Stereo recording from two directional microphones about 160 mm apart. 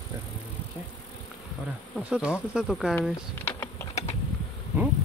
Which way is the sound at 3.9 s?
40° left (ahead or behind).